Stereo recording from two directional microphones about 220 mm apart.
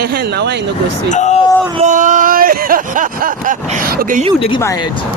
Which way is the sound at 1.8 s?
35° right (ahead or behind).